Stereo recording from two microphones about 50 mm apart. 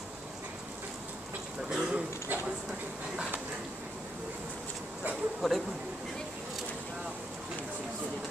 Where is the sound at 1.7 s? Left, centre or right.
Centre.